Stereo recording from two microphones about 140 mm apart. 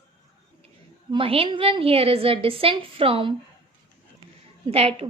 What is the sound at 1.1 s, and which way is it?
A woman's voice, 40° right (ahead or behind).